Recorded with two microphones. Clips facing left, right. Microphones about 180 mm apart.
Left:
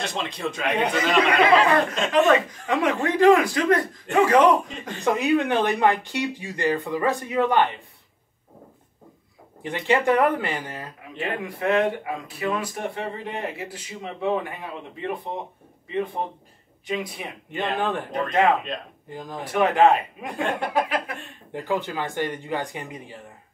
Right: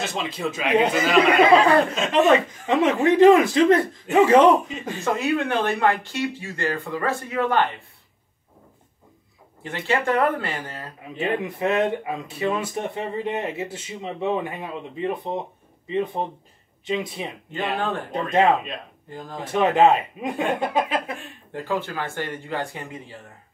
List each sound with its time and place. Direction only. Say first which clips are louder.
0.0 s a man's voice: right 2 dB; 5° right (ahead or behind)
1.4 s speech: right 2 dB; 30° right (ahead or behind)
4.6 s a man's voice: right 4 dB; 5° right (ahead or behind)
5.0 s speech: left 2 dB; 15° left (ahead or behind)
9.6 s speech: left 2 dB; 15° left (ahead or behind)
11.1 s speech: right 4 dB; 25° right (ahead or behind)
19.0 s speech: left 1 dB; 15° left (ahead or behind)
19.3 s speech: right 1 dB; 25° right (ahead or behind)
21.5 s speech: left 1 dB; 15° left (ahead or behind)